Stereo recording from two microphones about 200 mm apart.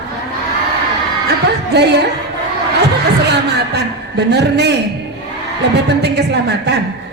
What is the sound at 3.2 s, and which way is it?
A woman's voice, 55° right (ahead or behind).